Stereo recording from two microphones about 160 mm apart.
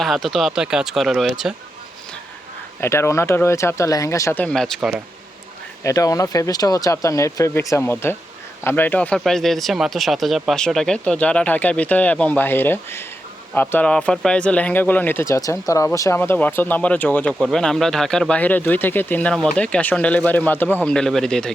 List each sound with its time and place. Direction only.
0.0 s speech: centre (ahead or behind)
2.8 s speech: 15° left (ahead or behind); by 5.0 s 5° right (ahead or behind)
5.8 s speech: 20° left (ahead or behind); by 21.5 s 5° left (ahead or behind)